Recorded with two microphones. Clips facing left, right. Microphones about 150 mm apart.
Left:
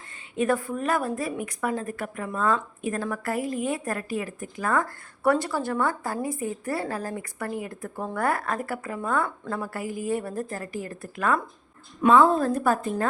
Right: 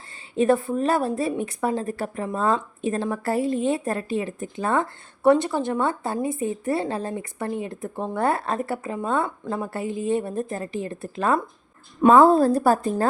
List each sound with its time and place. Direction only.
0.3 s a woman's voice: 30° right (ahead or behind)
12.0 s a woman's voice: 40° right (ahead or behind)